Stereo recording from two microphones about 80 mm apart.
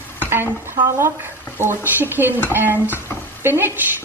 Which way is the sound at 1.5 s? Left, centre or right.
Right.